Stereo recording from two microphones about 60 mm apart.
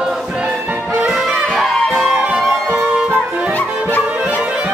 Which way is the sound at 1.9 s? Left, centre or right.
Centre.